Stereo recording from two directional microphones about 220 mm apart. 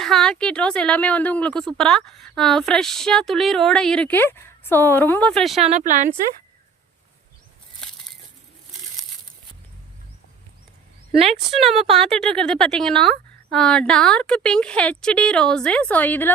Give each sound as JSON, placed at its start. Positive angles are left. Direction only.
{"t": 0.0, "sound": "a woman's voice", "side_deg": 0}
{"t": 5.7, "sound": "speech", "side_deg": -35}
{"t": 11.5, "sound": "a woman's voice", "side_deg": 0}